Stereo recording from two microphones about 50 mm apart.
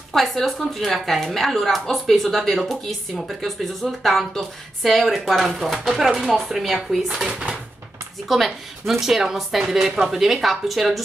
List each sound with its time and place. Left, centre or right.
0.1 s a woman's voice: centre
7.2 s speech: centre
8.3 s a woman's voice: centre